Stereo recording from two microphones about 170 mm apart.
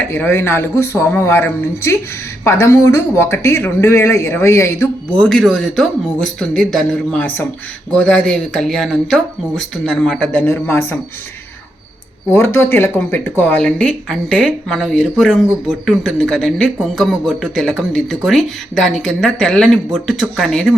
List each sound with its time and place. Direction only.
0.1 s speech: 10° left (ahead or behind)
5.1 s speech: 5° left (ahead or behind)
12.3 s speech: 15° left (ahead or behind)